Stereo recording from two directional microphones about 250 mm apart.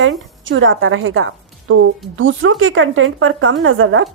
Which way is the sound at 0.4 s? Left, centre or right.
Right.